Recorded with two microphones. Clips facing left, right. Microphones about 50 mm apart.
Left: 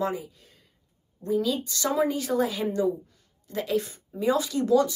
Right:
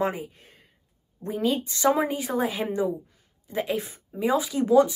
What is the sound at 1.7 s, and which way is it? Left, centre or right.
Speech, right.